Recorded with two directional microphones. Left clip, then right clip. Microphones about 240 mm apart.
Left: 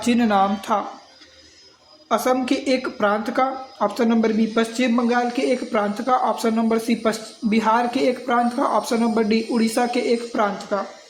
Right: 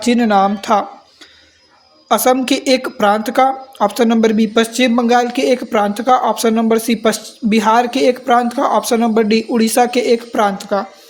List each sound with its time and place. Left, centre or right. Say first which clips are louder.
0.0 s speech: right 6 dB; right
2.0 s a woman's voice: right 7 dB; right